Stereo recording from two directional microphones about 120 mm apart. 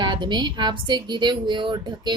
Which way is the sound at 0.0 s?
40° right (ahead or behind).